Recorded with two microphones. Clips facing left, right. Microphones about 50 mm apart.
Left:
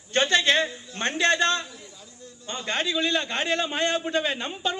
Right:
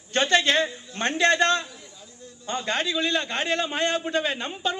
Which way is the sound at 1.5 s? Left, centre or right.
Right.